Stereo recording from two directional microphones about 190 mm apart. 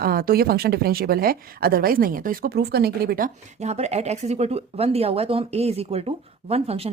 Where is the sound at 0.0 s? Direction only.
50° right (ahead or behind).